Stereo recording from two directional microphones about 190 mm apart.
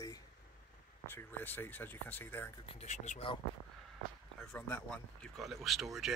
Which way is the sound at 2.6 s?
35° left (ahead or behind).